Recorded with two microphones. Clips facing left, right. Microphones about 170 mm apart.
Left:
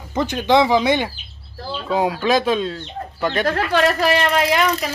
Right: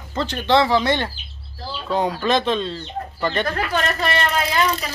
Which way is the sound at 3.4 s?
80° left.